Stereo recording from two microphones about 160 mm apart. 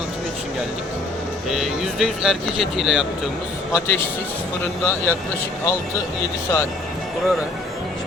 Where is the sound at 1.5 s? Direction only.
Centre (ahead or behind).